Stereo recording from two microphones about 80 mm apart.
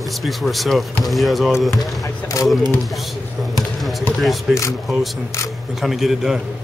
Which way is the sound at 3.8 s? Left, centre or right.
Centre.